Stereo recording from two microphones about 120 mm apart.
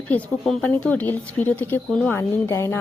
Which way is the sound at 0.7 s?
15° left (ahead or behind).